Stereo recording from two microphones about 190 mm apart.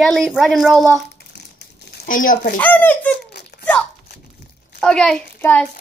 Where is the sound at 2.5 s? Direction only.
10° left (ahead or behind).